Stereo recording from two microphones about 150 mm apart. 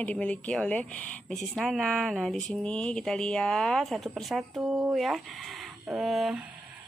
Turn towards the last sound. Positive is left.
turn(degrees=0)  # may be behind; listen again after turning